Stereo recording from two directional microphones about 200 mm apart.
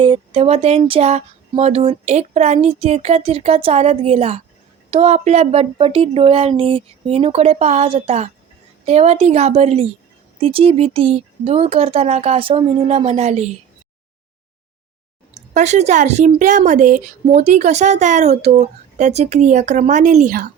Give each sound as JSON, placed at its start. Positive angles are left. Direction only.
{"t": 0.0, "sound": "speech", "side_deg": -25}
{"t": 15.4, "sound": "speech", "side_deg": -35}